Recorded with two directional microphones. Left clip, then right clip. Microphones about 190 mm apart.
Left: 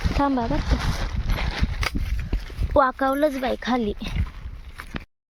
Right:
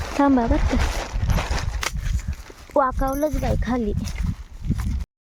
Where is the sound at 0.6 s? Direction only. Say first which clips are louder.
Right 3 dB; 55° right (ahead or behind).